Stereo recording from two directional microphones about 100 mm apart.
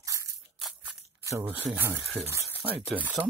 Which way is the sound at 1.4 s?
70° right (ahead or behind).